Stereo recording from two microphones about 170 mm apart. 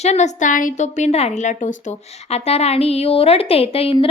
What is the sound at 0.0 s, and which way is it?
A woman's voice, 40° left (ahead or behind).